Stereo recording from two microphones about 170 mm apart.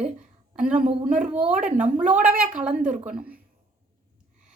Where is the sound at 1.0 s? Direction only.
50° right (ahead or behind).